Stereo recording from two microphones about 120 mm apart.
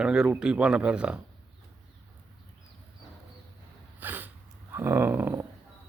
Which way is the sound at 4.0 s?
15° right (ahead or behind).